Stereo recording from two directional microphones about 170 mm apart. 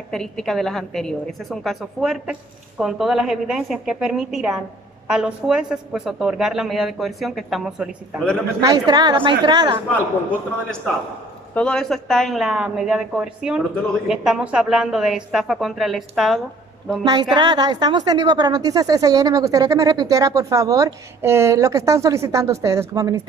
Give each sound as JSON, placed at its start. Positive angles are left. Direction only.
{"t": 0.1, "sound": "speech", "side_deg": 5}
{"t": 8.5, "sound": "a woman's voice", "side_deg": -25}
{"t": 11.5, "sound": "speech", "side_deg": 5}
{"t": 17.0, "sound": "a woman's voice", "side_deg": -25}